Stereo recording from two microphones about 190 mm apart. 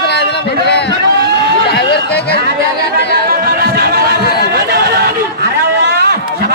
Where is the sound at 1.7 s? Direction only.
55° left (ahead or behind).